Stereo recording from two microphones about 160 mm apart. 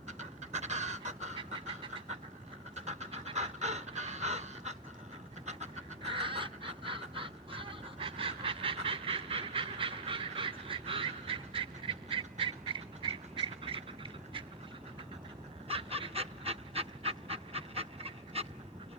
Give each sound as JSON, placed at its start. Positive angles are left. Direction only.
{"t": 0.1, "sound": "pant", "side_deg": -45}
{"t": 1.4, "sound": "a sound", "side_deg": -35}
{"t": 2.7, "sound": "pant", "side_deg": -45}
{"t": 5.5, "sound": "chicken", "side_deg": -45}
{"t": 15.6, "sound": "pant", "side_deg": -35}